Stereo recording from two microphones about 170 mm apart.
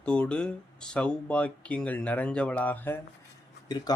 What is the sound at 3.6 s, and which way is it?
Speech, 25° left (ahead or behind).